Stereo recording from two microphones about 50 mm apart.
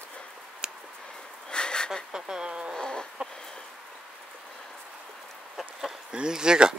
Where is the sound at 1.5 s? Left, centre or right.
Centre.